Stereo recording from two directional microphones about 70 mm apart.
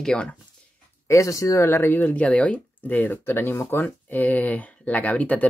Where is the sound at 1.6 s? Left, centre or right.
Left.